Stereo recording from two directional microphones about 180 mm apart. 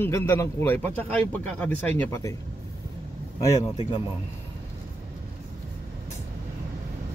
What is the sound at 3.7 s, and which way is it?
Speech, 35° left (ahead or behind).